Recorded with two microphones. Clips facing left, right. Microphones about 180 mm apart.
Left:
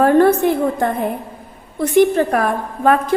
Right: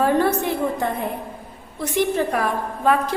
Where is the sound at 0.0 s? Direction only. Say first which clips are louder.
Left 7 dB; 55° left (ahead or behind).